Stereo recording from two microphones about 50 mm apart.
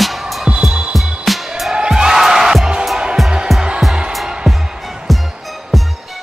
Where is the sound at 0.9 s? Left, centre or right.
Centre.